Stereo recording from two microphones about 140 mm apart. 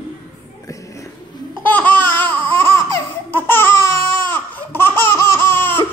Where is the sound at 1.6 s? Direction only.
10° left (ahead or behind).